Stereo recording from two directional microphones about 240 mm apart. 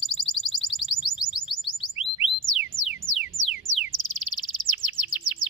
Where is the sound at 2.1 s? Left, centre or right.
Left.